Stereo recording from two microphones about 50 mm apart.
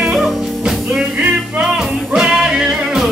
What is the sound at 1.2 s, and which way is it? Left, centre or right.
Music, right.